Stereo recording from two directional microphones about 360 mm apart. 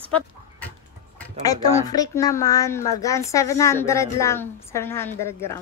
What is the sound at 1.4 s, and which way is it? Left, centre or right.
Speech, centre.